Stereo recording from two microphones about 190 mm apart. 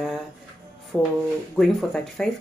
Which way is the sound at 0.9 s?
Centre (ahead or behind).